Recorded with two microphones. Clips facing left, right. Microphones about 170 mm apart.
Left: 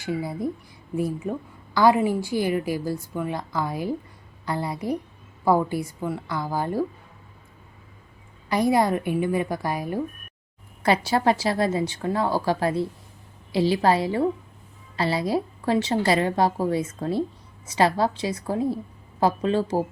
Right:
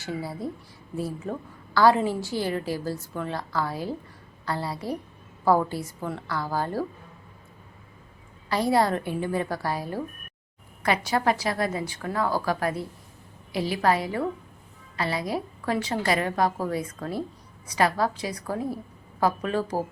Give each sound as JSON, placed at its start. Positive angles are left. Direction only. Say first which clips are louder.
{"t": 0.0, "sound": "a woman's voice", "louder": "left 4 dB", "side_deg": 15}
{"t": 8.4, "sound": "a woman's voice", "louder": "left 2 dB", "side_deg": 15}
{"t": 10.8, "sound": "a woman's voice", "louder": "left 3 dB", "side_deg": 30}